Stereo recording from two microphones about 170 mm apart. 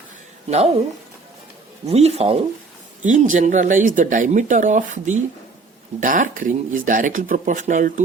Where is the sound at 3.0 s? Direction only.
45° right (ahead or behind).